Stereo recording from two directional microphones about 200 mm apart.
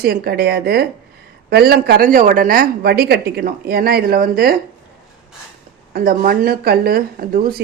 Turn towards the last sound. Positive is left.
turn(degrees=-45)  # may be behind; listen again after turning